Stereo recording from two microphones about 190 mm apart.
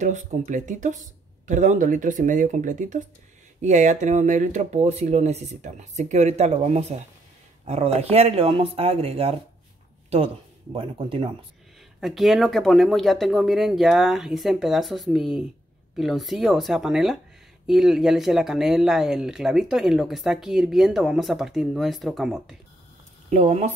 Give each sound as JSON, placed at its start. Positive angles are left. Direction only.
{"t": 0.0, "sound": "speech", "side_deg": -40}
{"t": 12.0, "sound": "speech", "side_deg": 0}
{"t": 23.3, "sound": "speech", "side_deg": -35}